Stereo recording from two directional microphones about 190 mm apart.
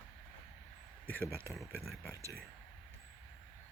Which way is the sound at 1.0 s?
10° left (ahead or behind).